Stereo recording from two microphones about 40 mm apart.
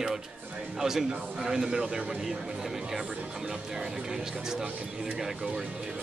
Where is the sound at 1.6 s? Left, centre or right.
Right.